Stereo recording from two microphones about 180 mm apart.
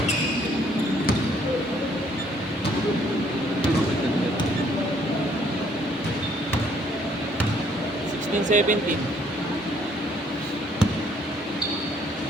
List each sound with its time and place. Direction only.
8.5 s speech: 45° right (ahead or behind)